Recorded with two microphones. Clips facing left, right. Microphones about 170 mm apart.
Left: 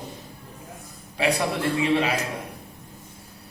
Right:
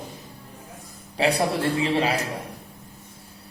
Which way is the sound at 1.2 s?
30° right (ahead or behind).